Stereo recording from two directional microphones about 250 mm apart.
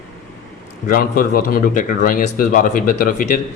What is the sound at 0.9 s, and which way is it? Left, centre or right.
Speech, left.